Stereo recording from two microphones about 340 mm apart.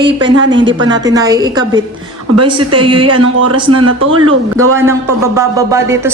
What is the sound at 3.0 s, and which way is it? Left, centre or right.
Speech, right.